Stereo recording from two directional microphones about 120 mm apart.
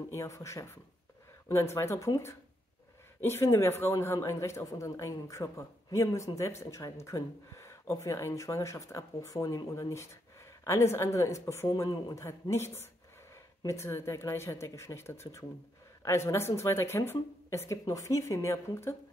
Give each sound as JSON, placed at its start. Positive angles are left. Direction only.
{"t": 0.1, "sound": "a man's voice", "side_deg": 25}
{"t": 11.7, "sound": "a man's voice", "side_deg": 35}